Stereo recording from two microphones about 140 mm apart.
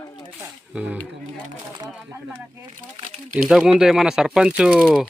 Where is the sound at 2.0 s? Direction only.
20° right (ahead or behind).